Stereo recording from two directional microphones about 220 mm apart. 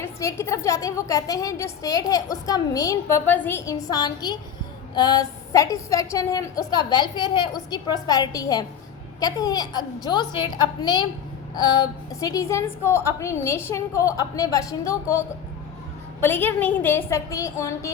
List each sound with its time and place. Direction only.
0.0 s a woman's voice: 15° left (ahead or behind)
16.2 s a woman's voice: 10° left (ahead or behind)